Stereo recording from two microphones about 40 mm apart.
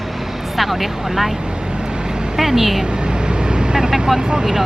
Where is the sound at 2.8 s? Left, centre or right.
Right.